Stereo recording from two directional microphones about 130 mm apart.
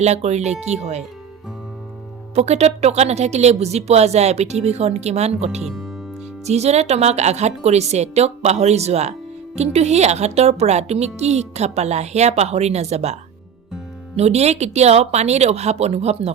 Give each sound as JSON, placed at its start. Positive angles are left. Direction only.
{"t": 0.0, "sound": "a woman's voice", "side_deg": -55}
{"t": 2.3, "sound": "a woman's voice", "side_deg": -55}
{"t": 5.6, "sound": "speech", "side_deg": 0}
{"t": 6.4, "sound": "a woman's voice", "side_deg": -55}
{"t": 14.2, "sound": "a woman's voice", "side_deg": -55}